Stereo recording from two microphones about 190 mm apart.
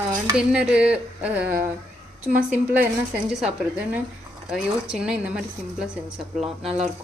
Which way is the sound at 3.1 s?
5° right (ahead or behind).